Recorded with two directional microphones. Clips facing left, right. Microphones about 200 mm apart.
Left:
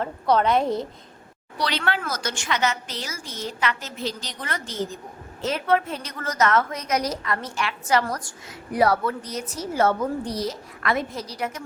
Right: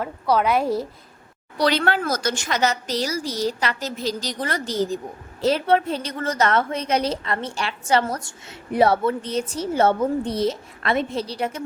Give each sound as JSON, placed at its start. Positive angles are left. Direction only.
{"t": 0.0, "sound": "a woman's voice", "side_deg": -10}
{"t": 1.5, "sound": "a woman's voice", "side_deg": -45}